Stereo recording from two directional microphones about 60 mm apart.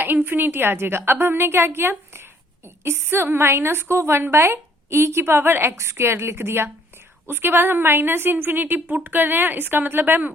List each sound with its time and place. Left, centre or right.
0.0 s a woman's voice: right
5.7 s a woman's voice: right